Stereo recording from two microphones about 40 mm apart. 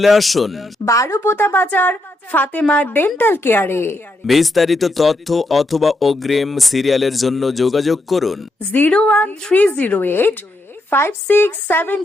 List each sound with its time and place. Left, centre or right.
0.0 s speech: centre
1.2 s a woman's voice: left
1.6 s a woman's voice: left
3.2 s a woman's voice: left
4.3 s speech: centre
8.9 s a woman's voice: left
10.8 s speech: left